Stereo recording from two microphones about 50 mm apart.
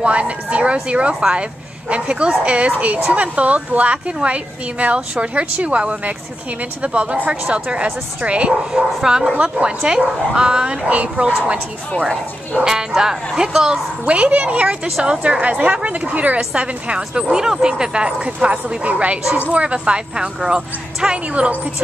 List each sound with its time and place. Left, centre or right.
0.0 s speech: right
12.6 s speech: centre
14.0 s speech: right
21.3 s speech: right